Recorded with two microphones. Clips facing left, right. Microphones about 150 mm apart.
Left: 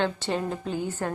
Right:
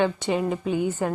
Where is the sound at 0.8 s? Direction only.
20° right (ahead or behind).